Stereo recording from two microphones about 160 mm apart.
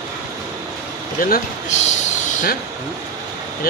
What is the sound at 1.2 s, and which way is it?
Speech, 55° left (ahead or behind).